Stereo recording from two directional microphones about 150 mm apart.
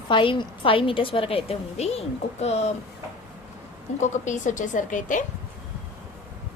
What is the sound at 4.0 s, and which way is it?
A woman's voice, 55° left (ahead or behind).